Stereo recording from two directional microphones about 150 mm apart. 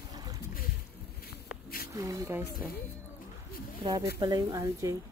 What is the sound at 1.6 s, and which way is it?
Snake, 85° left.